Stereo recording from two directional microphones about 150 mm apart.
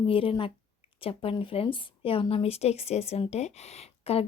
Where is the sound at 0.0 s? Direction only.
40° left (ahead or behind).